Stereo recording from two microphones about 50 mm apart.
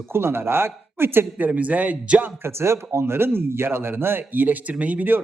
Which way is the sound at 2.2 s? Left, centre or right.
Right.